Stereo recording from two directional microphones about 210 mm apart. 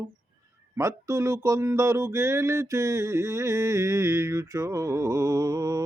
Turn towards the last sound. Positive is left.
turn(degrees=-15)  # may be behind; listen again after turning